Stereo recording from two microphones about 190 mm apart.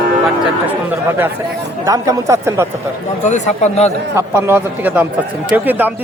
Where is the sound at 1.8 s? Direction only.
15° right (ahead or behind).